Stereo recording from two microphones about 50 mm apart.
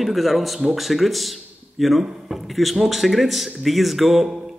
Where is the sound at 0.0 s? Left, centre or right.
Centre.